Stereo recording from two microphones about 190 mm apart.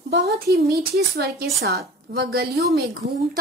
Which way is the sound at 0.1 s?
60° right (ahead or behind).